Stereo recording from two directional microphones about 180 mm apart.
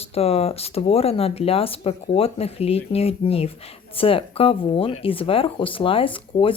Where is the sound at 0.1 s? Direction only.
35° left (ahead or behind).